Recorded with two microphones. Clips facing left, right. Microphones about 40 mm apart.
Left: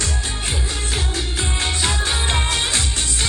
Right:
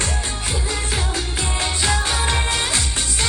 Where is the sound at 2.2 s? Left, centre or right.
Left.